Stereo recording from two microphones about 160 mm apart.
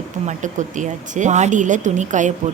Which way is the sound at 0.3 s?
50° right (ahead or behind).